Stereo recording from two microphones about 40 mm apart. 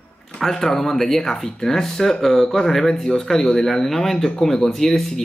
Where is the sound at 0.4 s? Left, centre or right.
Centre.